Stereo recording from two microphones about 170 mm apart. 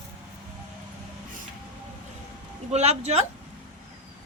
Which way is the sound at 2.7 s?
40° right (ahead or behind).